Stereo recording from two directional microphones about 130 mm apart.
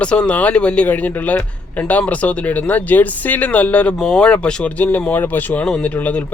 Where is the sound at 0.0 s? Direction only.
10° left (ahead or behind).